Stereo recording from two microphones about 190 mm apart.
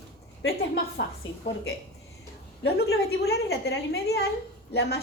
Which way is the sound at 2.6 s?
60° left (ahead or behind).